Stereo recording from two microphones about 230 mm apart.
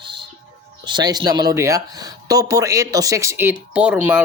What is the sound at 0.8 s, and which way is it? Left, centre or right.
Speech, centre.